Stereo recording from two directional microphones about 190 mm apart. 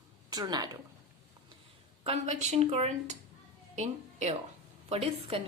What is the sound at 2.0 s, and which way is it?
A woman's voice, 35° right (ahead or behind).